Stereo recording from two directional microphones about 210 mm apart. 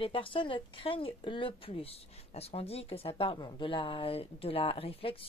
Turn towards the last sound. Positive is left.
turn(degrees=25)  # may be behind; listen again after turning